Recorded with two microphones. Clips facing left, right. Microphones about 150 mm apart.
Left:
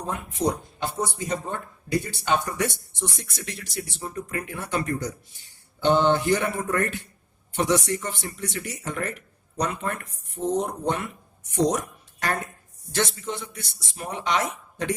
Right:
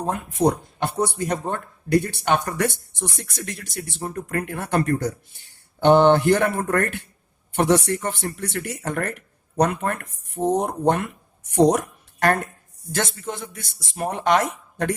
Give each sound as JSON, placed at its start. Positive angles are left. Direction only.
{"t": 0.0, "sound": "speech", "side_deg": -50}
{"t": 12.9, "sound": "speech", "side_deg": -50}